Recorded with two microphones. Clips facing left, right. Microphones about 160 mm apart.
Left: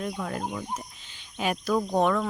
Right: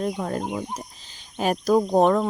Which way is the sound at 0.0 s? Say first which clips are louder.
Right 5 dB; 35° right (ahead or behind).